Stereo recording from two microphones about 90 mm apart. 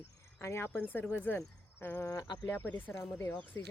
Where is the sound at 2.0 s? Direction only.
45° left (ahead or behind).